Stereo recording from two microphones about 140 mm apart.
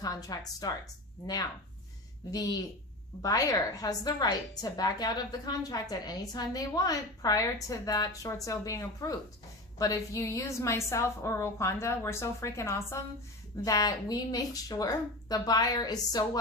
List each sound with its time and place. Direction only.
0.0 s a woman's voice: 25° left (ahead or behind)
2.3 s a woman's voice: 25° left (ahead or behind)